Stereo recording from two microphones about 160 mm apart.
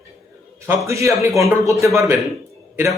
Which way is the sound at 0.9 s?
20° right (ahead or behind).